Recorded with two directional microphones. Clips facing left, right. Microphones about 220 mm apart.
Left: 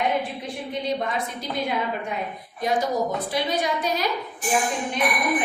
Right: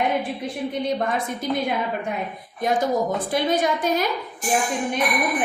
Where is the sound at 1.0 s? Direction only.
50° right (ahead or behind).